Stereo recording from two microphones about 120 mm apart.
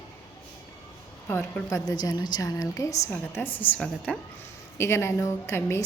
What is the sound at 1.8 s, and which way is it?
A woman's voice, 35° left (ahead or behind).